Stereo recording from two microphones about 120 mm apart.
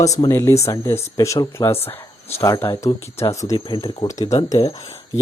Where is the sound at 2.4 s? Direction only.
40° left (ahead or behind).